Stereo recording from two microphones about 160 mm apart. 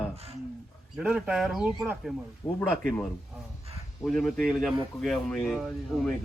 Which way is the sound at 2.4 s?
15° left (ahead or behind).